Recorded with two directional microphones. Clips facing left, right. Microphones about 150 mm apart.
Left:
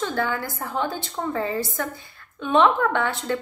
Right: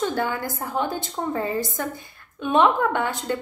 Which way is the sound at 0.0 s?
15° right (ahead or behind).